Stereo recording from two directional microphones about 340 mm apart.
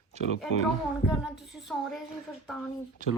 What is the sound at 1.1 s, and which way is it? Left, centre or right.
Speech, centre.